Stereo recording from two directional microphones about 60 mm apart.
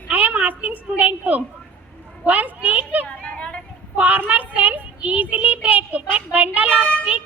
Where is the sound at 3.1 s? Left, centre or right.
Centre.